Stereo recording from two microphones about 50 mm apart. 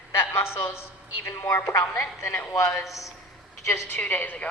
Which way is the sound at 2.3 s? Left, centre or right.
Left.